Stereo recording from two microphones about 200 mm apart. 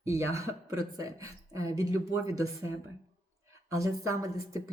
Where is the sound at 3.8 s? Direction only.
15° right (ahead or behind).